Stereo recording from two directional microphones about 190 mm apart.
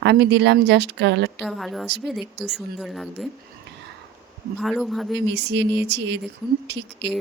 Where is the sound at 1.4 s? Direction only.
Centre (ahead or behind).